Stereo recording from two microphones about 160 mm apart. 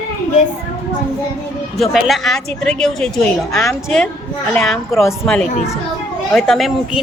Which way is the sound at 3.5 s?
20° left (ahead or behind).